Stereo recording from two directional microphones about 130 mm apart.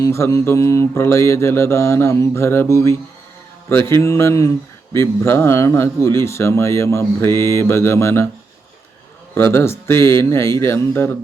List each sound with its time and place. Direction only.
0.0 s mantra: 20° left (ahead or behind)
9.3 s mantra: 20° left (ahead or behind)